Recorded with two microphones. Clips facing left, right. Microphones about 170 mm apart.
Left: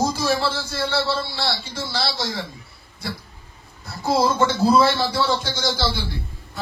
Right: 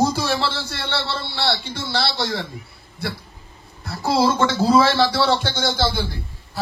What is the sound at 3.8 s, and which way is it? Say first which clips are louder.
A man's voice: right 1 dB; 70° right (ahead or behind).